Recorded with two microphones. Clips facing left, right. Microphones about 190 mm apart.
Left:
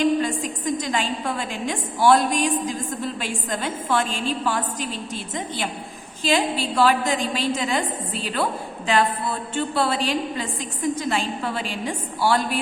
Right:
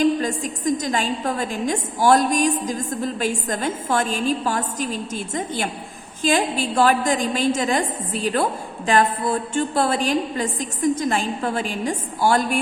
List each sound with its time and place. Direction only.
0.0 s a woman's voice: 40° right (ahead or behind)